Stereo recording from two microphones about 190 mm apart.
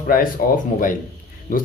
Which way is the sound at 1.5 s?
45° left (ahead or behind).